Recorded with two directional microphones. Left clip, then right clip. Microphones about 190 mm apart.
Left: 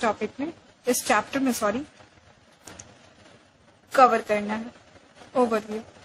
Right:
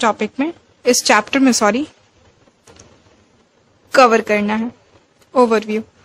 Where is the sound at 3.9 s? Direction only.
50° right (ahead or behind).